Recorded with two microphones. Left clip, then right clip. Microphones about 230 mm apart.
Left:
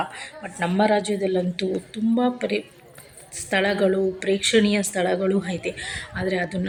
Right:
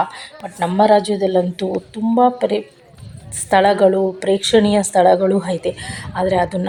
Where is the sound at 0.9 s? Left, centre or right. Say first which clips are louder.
Right 8 dB; centre.